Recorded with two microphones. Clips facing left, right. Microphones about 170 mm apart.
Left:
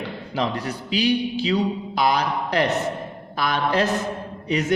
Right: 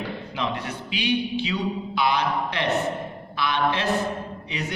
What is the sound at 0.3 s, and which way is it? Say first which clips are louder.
Speech: left 5 dB; 40° left (ahead or behind).